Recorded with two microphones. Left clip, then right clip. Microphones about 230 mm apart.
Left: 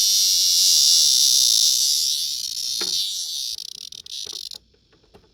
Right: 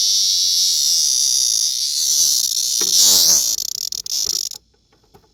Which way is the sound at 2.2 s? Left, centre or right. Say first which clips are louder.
Right 8 dB; right.